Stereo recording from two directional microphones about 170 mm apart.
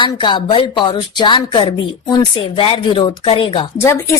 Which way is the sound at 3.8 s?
15° left (ahead or behind).